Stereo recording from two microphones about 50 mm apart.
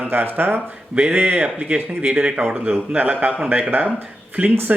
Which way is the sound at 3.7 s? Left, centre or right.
Right.